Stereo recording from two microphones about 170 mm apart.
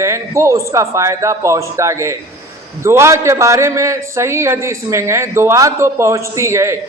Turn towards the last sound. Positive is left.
turn(degrees=-15)  # may be behind; listen again after turning